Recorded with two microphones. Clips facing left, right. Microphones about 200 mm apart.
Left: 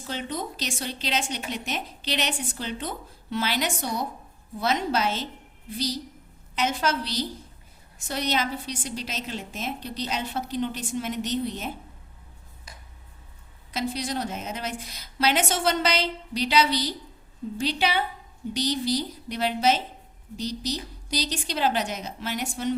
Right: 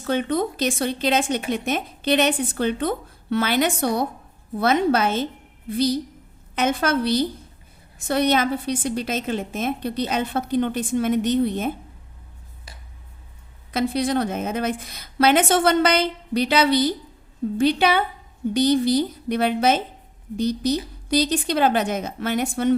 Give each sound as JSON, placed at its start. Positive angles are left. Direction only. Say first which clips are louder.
{"t": 0.0, "sound": "a woman's voice", "louder": "right 10 dB", "side_deg": -60}
{"t": 13.7, "sound": "a woman's voice", "louder": "right 8 dB", "side_deg": -55}